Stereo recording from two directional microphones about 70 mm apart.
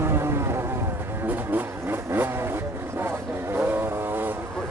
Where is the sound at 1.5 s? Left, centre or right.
Right.